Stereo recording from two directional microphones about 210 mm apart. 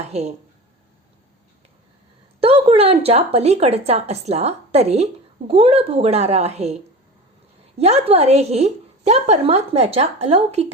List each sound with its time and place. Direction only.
0.0 s speech: 30° right (ahead or behind)
2.4 s a woman's voice: 25° right (ahead or behind)
7.8 s a woman's voice: 30° right (ahead or behind)